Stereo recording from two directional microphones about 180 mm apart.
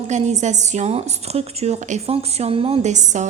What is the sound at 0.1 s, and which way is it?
A woman's voice, 40° right (ahead or behind).